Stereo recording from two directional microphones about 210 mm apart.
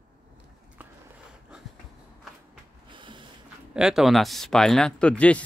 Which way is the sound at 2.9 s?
25° right (ahead or behind).